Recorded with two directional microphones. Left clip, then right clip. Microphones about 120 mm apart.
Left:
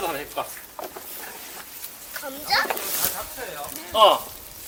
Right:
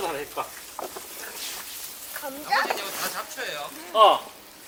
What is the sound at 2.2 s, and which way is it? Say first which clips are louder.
Speech: left 1 dB; 5° left (ahead or behind).